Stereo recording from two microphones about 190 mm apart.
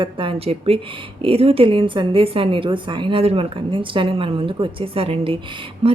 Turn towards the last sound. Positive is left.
turn(degrees=-35)  # may be behind; listen again after turning